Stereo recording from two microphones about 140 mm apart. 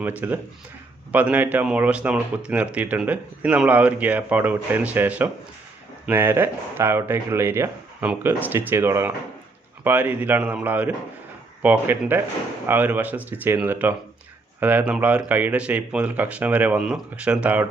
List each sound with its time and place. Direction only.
0.0 s speech: 10° right (ahead or behind)